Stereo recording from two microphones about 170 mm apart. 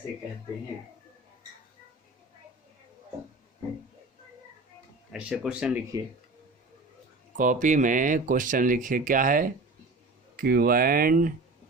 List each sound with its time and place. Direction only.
5.1 s speech: 5° right (ahead or behind)
7.3 s speech: 50° right (ahead or behind)